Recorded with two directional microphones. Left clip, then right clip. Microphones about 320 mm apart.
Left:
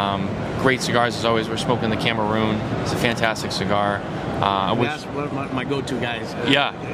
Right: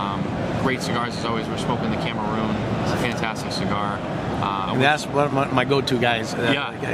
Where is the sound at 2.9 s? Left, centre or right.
Left.